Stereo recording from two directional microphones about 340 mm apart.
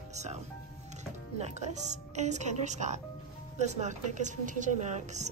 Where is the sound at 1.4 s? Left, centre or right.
Centre.